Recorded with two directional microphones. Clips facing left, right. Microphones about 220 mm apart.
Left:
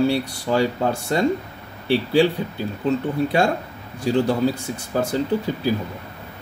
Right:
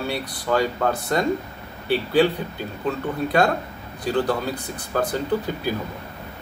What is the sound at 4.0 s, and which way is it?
Speech, 25° left (ahead or behind).